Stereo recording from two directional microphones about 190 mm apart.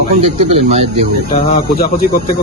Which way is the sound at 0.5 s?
35° right (ahead or behind).